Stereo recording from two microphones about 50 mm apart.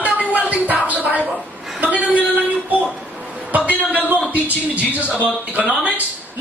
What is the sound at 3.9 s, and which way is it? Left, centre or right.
A man's voice, right.